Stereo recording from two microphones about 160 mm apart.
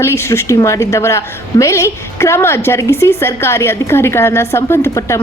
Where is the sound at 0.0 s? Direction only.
15° left (ahead or behind).